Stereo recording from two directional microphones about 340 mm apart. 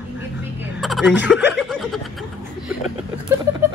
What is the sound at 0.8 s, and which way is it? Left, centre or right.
Music, centre.